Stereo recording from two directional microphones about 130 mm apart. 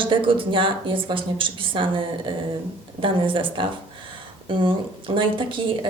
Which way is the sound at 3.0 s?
40° right (ahead or behind).